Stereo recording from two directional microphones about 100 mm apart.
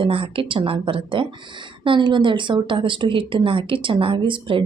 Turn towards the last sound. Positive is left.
turn(degrees=-60)  # may be behind; listen again after turning